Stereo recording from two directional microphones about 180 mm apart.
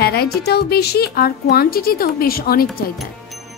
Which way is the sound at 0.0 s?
60° left (ahead or behind).